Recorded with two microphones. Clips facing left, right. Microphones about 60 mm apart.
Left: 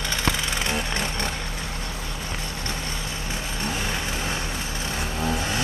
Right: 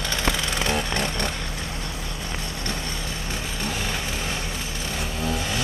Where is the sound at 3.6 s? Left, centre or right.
Left.